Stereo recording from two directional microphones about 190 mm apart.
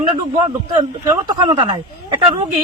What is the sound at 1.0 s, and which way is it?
Speech, 25° right (ahead or behind).